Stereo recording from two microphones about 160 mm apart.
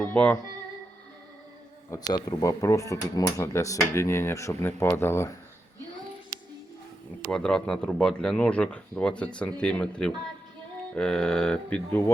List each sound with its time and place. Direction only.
0.0 s speech: 10° left (ahead or behind)
1.9 s speech: 25° left (ahead or behind)
7.2 s speech: 5° left (ahead or behind)